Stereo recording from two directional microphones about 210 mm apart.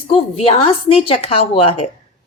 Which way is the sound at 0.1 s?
25° left (ahead or behind).